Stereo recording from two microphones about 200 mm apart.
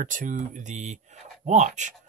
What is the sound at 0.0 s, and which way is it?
Speech, 40° right (ahead or behind).